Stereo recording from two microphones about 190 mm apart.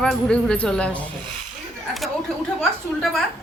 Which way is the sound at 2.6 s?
Centre (ahead or behind).